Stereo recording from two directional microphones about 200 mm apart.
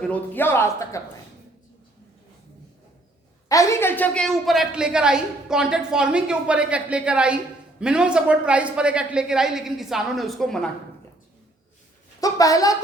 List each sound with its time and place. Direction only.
0.0 s a man's voice: 10° left (ahead or behind)
3.5 s a woman's voice: 15° left (ahead or behind)
12.2 s a man's voice: 15° left (ahead or behind)